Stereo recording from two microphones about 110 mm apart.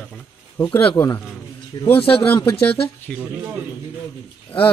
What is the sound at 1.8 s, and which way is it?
Speech, 55° left (ahead or behind).